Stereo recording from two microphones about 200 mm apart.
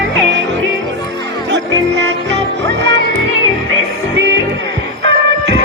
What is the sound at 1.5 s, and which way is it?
Music, 60° right (ahead or behind).